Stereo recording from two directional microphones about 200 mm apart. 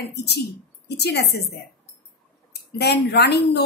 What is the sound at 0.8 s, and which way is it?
Speech, 55° left (ahead or behind).